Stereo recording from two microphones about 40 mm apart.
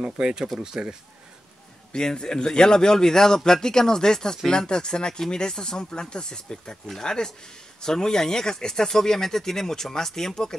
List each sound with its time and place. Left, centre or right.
0.0 s speech: right
1.9 s speech: centre